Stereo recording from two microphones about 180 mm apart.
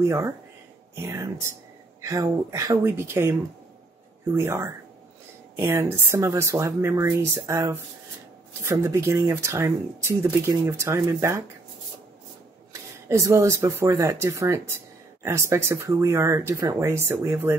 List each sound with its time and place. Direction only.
0.0 s speech: 15° right (ahead or behind)
13.1 s speech: 15° right (ahead or behind)